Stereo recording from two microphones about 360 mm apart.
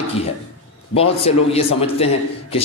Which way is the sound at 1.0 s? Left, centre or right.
Centre.